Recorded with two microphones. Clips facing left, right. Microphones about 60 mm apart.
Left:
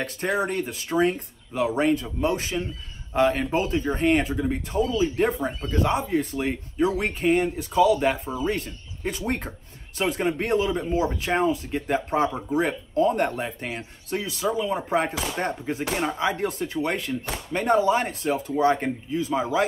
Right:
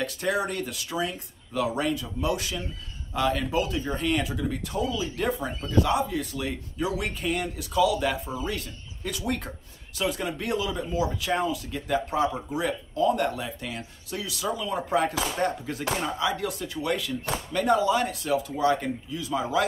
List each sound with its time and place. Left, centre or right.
0.0 s speech: left
1.5 s speech: left